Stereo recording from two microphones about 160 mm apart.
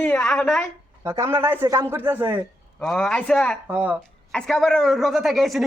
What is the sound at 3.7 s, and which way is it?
Speech, 10° right (ahead or behind).